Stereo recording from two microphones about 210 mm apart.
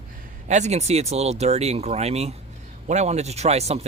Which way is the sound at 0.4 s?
35° right (ahead or behind).